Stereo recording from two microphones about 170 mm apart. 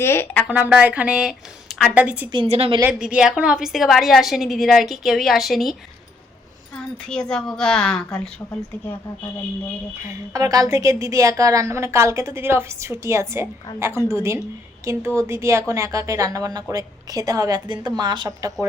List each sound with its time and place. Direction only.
0.0 s a woman's voice: 15° left (ahead or behind)
0.4 s a woman's voice: 5° right (ahead or behind)
2.3 s a woman's voice: 35° right (ahead or behind)
2.8 s a woman's voice: 5° right (ahead or behind)
6.7 s a woman's voice: 5° left (ahead or behind)
10.1 s a woman's voice: 20° right (ahead or behind)